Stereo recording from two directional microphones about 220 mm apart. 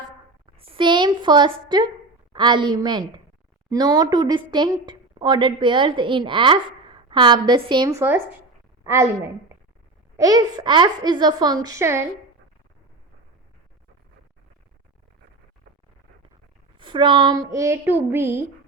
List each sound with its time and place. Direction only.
0.5 s a woman's voice: 25° right (ahead or behind)
16.7 s speech: 20° right (ahead or behind)